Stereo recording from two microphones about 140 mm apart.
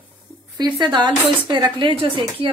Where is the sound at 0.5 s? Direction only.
30° right (ahead or behind).